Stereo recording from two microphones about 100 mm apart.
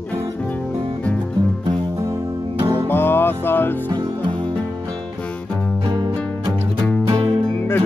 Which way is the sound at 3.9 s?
50° right (ahead or behind).